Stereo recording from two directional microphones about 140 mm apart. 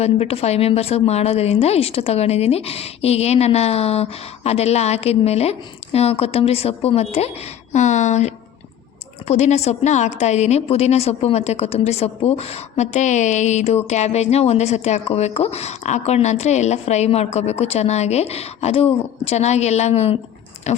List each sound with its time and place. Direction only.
0.0 s a woman's voice: 45° left (ahead or behind)